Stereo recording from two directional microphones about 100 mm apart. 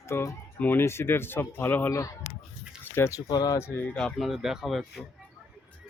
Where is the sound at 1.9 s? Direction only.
30° left (ahead or behind).